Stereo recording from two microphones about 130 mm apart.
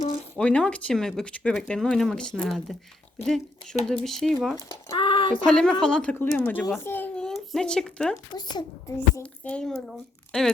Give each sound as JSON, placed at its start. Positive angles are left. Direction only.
{"t": 0.3, "sound": "speech", "side_deg": 10}
{"t": 4.9, "sound": "a sound", "side_deg": 40}
{"t": 5.5, "sound": "speech", "side_deg": 5}
{"t": 6.8, "sound": "a sound", "side_deg": 15}
{"t": 7.3, "sound": "speech", "side_deg": 5}
{"t": 8.4, "sound": "a child's voice", "side_deg": 30}
{"t": 9.2, "sound": "speech", "side_deg": 10}